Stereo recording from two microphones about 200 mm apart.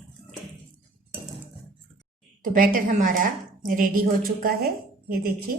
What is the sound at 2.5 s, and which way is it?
A woman's voice, 40° right (ahead or behind).